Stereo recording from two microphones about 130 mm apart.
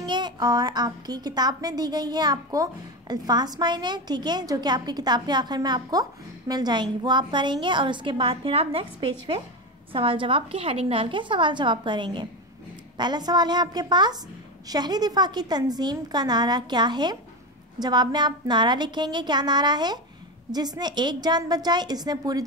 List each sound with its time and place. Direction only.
0.0 s a woman's voice: 35° right (ahead or behind)